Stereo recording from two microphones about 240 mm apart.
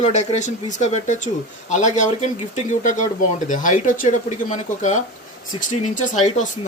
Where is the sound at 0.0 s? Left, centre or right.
Left.